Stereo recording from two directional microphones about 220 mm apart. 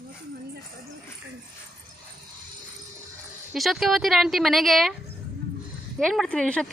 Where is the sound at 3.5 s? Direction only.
Centre (ahead or behind).